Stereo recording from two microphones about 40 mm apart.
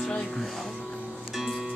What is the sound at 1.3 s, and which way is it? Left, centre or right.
Music, centre.